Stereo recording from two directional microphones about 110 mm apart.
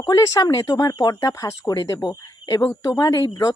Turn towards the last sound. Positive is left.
turn(degrees=35)  # may be behind; listen again after turning